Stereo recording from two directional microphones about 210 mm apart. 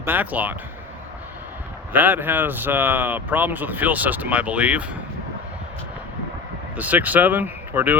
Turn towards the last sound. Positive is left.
turn(degrees=-10)  # may be behind; listen again after turning